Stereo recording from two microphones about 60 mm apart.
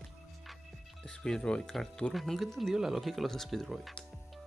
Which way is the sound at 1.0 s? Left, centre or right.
Centre.